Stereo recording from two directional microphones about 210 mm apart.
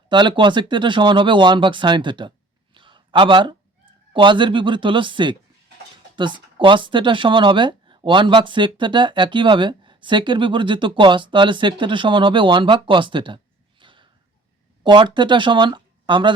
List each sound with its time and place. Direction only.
0.1 s speech: 20° right (ahead or behind)